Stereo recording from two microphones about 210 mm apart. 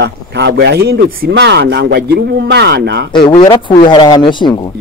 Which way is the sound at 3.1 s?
20° left (ahead or behind).